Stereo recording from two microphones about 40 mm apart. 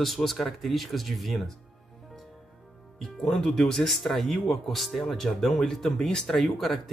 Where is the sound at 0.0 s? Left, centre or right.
Centre.